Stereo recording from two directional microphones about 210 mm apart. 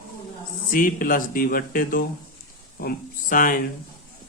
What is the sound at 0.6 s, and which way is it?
Speech, 40° left (ahead or behind).